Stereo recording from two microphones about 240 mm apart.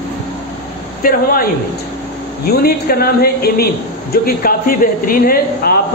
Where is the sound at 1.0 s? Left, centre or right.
Left.